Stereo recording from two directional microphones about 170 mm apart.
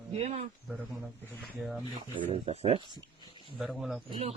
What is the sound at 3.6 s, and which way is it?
Speech, centre (ahead or behind).